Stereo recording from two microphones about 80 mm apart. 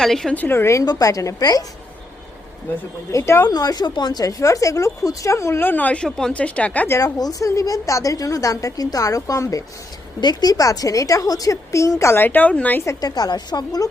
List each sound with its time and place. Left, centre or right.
0.0 s a woman's voice: centre
0.3 s a woman's voice: left
0.9 s a woman's voice: left
3.1 s a woman's voice: left
3.5 s a woman's voice: left; by 6.8 s centre
7.0 s a woman's voice: left
10.2 s a woman's voice: left
12.2 s a woman's voice: left
13.0 s a woman's voice: left